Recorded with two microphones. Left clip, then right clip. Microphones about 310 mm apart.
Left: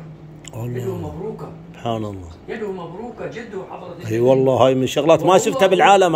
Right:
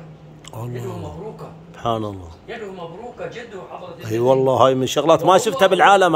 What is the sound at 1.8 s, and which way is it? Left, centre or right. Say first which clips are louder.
Speech: right 2 dB; centre.